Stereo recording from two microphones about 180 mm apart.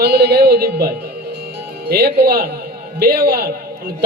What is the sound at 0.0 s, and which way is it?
A man's voice, 65° right (ahead or behind).